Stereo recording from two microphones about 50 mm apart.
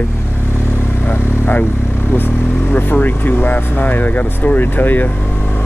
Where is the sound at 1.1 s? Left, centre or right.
Left.